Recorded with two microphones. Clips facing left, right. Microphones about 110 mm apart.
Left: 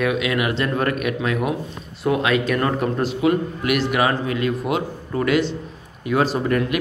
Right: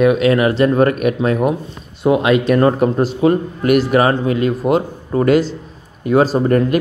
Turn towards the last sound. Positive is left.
turn(degrees=-40)  # may be behind; listen again after turning